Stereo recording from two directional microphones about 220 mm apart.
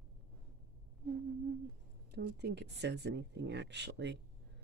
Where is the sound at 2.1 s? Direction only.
50° right (ahead or behind).